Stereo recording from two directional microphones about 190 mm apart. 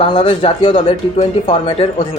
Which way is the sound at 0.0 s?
25° left (ahead or behind).